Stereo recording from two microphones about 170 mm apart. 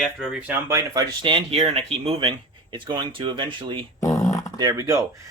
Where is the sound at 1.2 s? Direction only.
30° right (ahead or behind).